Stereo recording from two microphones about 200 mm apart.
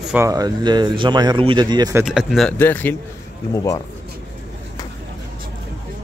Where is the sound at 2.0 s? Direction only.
Centre (ahead or behind).